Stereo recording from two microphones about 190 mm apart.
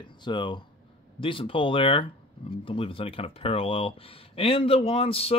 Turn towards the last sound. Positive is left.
turn(degrees=30)  # may be behind; listen again after turning